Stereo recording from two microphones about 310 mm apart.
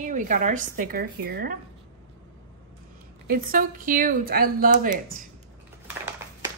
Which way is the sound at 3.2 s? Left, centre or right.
Right.